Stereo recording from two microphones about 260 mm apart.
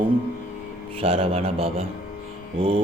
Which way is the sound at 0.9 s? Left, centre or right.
Right.